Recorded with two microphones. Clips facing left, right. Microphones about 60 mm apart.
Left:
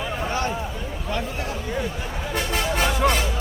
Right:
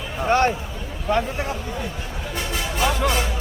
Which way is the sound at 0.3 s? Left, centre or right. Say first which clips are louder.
Right 10 dB; right.